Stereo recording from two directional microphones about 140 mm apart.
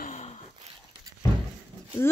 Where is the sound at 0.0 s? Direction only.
55° left (ahead or behind).